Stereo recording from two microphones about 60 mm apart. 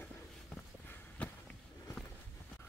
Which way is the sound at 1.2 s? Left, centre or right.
Left.